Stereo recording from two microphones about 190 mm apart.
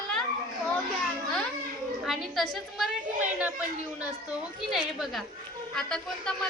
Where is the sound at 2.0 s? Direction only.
Centre (ahead or behind).